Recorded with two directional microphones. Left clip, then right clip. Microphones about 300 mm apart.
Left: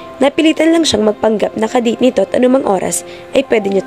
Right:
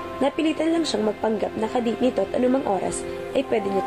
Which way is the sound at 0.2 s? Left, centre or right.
Left.